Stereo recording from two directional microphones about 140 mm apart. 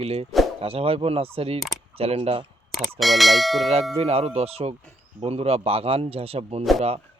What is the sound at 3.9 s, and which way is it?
Speech, 45° right (ahead or behind).